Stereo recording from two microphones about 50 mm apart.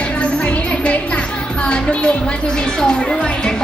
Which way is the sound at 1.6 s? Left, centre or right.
Left.